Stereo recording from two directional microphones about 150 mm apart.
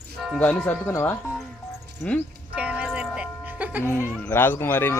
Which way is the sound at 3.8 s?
15° left (ahead or behind).